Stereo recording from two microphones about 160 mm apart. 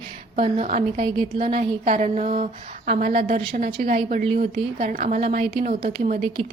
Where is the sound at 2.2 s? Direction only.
40° right (ahead or behind).